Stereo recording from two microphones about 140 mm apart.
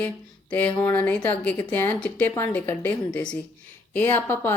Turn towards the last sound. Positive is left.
turn(degrees=15)  # may be behind; listen again after turning